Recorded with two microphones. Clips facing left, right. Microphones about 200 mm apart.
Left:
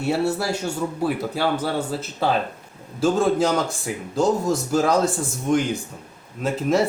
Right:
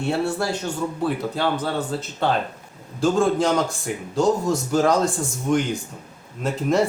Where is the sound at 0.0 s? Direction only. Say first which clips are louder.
Left 1 dB; 5° left (ahead or behind).